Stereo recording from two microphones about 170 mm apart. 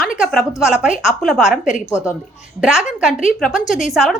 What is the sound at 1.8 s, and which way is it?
Speech, 15° left (ahead or behind).